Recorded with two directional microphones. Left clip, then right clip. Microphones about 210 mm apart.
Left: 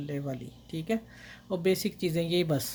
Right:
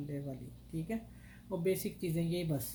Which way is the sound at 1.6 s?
45° left (ahead or behind).